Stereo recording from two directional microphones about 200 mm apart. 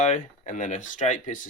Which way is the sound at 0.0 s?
40° left (ahead or behind).